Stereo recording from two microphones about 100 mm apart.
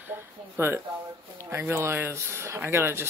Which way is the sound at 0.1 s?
25° right (ahead or behind).